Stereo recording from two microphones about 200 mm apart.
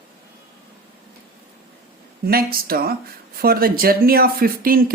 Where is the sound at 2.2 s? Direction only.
50° right (ahead or behind).